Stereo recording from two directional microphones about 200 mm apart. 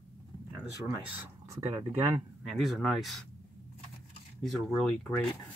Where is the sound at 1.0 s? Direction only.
10° right (ahead or behind).